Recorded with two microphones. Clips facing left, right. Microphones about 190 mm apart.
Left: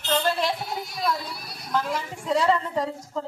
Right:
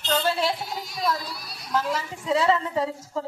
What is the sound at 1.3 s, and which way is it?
Speech, 55° left (ahead or behind).